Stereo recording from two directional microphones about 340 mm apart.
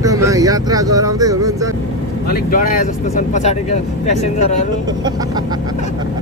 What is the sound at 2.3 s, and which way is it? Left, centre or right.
Speech, left.